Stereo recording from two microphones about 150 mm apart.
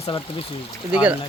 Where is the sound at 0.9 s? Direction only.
10° right (ahead or behind).